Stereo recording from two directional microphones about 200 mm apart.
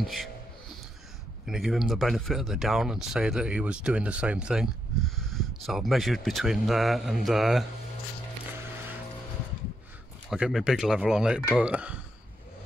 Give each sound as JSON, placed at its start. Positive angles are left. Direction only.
{"t": 0.0, "sound": "speech", "side_deg": 0}
{"t": 1.4, "sound": "speech", "side_deg": 0}
{"t": 10.3, "sound": "speech", "side_deg": -5}